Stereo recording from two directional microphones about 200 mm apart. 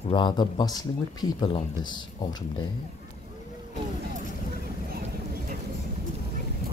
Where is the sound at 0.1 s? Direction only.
20° left (ahead or behind).